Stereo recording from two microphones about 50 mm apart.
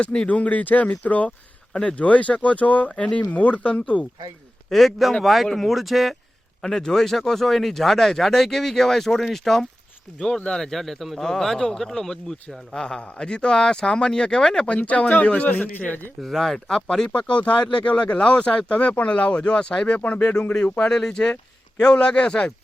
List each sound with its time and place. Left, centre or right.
0.0 s speech: left
4.7 s speech: centre
6.6 s speech: centre
10.3 s speech: centre
14.8 s speech: left
16.2 s speech: centre
17.2 s speech: left
20.7 s speech: centre